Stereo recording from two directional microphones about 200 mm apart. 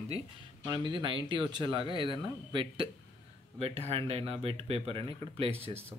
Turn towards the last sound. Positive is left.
turn(degrees=-30)  # may be behind; listen again after turning